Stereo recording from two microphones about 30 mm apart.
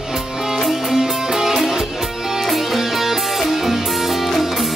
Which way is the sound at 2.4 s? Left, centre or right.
Centre.